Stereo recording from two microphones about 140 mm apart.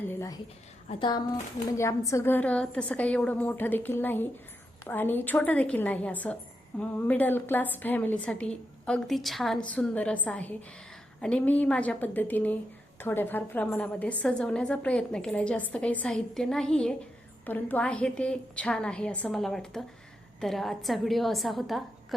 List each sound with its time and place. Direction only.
0.1 s a sound: 20° left (ahead or behind)
0.9 s speech: 35° left (ahead or behind)
1.7 s a woman's voice: 20° left (ahead or behind); by 21.8 s centre (ahead or behind)